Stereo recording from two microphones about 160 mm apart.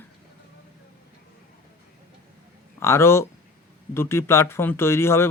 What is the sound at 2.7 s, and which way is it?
Speech, 15° left (ahead or behind).